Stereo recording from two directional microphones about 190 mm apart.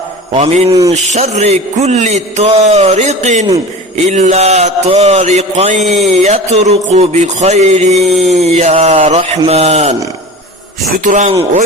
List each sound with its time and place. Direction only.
0.3 s a man's voice: 35° right (ahead or behind)
10.9 s a man's voice: 40° right (ahead or behind)